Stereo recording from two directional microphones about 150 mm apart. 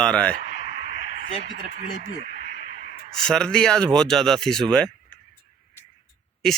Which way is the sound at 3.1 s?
5° left (ahead or behind).